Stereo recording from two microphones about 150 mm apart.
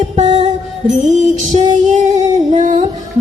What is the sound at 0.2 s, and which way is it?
Music, 50° right (ahead or behind).